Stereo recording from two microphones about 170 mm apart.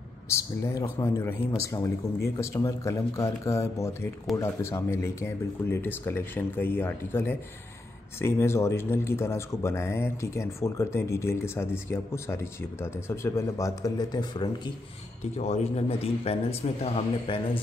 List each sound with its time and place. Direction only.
0.3 s speech: 15° left (ahead or behind)
15.3 s a man's voice: 40° left (ahead or behind)